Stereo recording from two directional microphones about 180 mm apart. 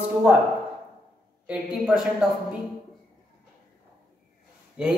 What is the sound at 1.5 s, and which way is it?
Speech, 5° right (ahead or behind).